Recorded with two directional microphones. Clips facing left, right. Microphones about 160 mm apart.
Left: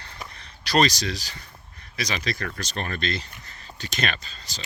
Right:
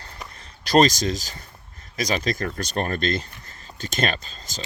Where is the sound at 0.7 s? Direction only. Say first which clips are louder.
Right 4 dB; 45° right (ahead or behind).